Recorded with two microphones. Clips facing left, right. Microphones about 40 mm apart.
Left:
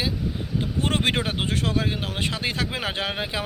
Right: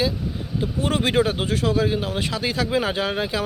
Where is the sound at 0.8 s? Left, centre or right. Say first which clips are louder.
Right 4 dB; left.